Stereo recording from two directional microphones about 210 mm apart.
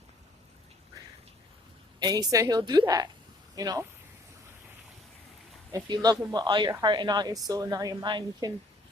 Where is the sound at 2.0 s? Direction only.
20° right (ahead or behind).